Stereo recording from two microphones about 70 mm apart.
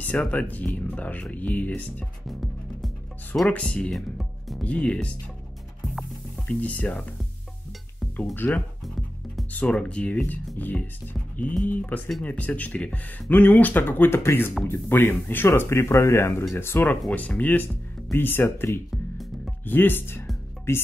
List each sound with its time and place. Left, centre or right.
0.0 s speech: left
2.2 s music: centre
3.4 s speech: centre
3.9 s music: centre
4.6 s speech: centre
6.4 s speech: centre
8.4 s speech: left